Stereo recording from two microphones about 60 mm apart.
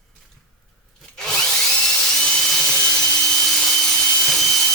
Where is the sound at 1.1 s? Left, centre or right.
Centre.